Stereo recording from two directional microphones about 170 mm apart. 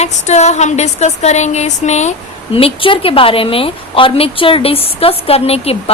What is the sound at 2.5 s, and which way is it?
A woman's voice, 30° left (ahead or behind).